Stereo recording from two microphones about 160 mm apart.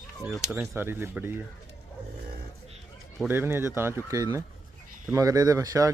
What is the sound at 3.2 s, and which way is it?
Speech, 15° right (ahead or behind).